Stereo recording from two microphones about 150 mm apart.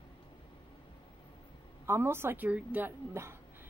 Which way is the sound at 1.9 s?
15° right (ahead or behind).